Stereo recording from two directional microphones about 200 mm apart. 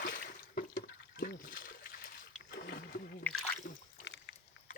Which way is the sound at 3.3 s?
5° left (ahead or behind).